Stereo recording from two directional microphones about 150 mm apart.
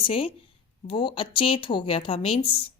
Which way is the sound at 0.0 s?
35° left (ahead or behind).